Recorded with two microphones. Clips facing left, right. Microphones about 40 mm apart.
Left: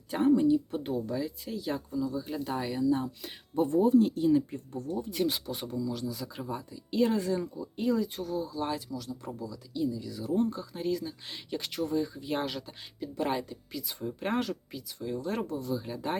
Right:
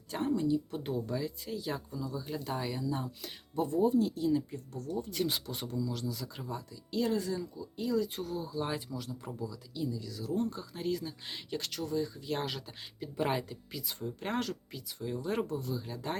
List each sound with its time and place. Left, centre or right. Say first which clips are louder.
0.1 s speech: left 7 dB; centre
0.8 s speech: left 3 dB; centre
3.2 s speech: left 5 dB; centre
4.1 s speech: left 5 dB; left
5.0 s speech: left 3 dB; centre
6.9 s speech: left 5 dB; left
8.1 s speech: left 3 dB; centre
10.0 s speech: left 3 dB; centre
10.5 s speech: left 3 dB; centre
11.7 s speech: left 5 dB; centre
12.5 s speech: left 3 dB; centre
14.0 s speech: left 4 dB; centre